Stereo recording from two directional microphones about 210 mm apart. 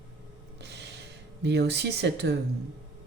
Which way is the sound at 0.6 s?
55° right (ahead or behind).